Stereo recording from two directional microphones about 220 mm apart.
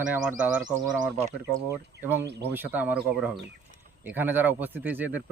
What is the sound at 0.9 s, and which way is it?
Speech, 30° right (ahead or behind).